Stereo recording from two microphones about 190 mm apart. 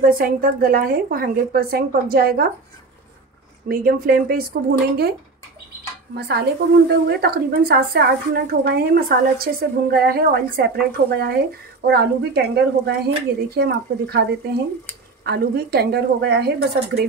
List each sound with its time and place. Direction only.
0.0 s speech: 50° right (ahead or behind)
3.6 s speech: 50° right (ahead or behind)
6.1 s a woman's voice: 55° right (ahead or behind)